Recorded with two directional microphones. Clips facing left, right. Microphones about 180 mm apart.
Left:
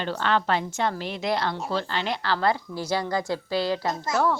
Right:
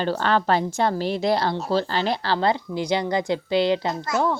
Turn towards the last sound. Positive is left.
turn(degrees=-20)  # may be behind; listen again after turning